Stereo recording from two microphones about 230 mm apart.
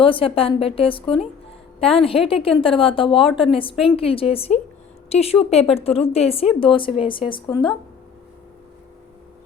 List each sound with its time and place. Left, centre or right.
0.0 s speech: left